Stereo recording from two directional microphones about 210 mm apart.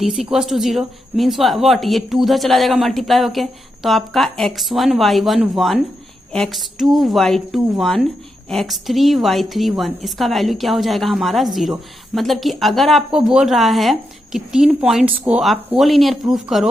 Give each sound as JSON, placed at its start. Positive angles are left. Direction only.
{"t": 0.0, "sound": "a woman's voice", "side_deg": 0}